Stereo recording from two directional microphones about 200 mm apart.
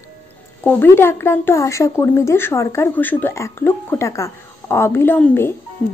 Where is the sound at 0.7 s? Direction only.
10° left (ahead or behind).